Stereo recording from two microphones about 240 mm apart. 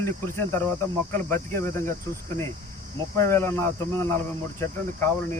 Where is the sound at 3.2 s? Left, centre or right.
Centre.